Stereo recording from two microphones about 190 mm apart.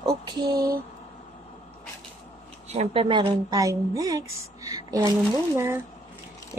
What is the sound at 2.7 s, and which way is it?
A woman's voice, 30° right (ahead or behind).